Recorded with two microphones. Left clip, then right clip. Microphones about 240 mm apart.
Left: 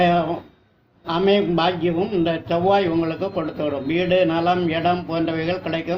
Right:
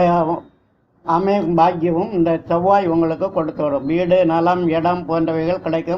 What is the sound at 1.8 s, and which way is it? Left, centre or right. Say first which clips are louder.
A man's voice: right 3 dB; right.